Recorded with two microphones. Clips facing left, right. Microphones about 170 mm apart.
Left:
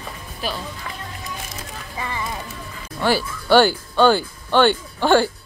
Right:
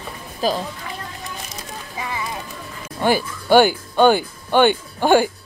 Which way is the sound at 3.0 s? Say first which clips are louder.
Right 1 dB; 15° right (ahead or behind).